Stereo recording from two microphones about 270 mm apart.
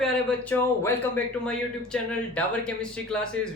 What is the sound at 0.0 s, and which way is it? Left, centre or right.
Speech, centre.